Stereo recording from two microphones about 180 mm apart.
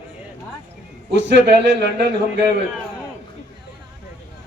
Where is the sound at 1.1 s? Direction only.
80° right.